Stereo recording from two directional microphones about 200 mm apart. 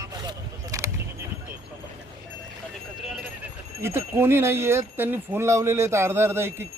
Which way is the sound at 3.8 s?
15° right (ahead or behind).